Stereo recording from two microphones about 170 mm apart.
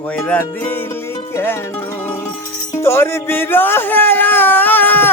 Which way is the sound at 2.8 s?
15° left (ahead or behind).